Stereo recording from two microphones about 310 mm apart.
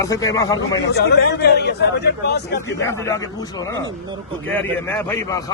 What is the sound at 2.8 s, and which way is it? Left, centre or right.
A man's voice, centre.